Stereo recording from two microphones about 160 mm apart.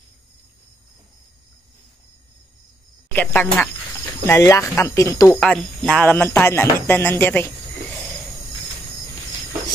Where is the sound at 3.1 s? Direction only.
10° left (ahead or behind).